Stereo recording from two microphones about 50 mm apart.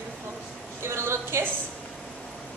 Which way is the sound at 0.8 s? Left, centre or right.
Right.